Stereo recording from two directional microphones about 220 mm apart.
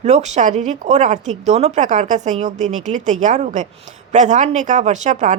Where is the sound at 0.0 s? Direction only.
30° right (ahead or behind).